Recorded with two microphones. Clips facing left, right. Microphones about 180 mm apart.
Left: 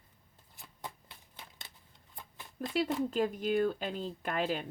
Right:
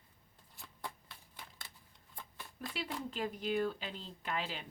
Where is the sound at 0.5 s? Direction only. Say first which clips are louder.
Left 1 dB; 20° left (ahead or behind).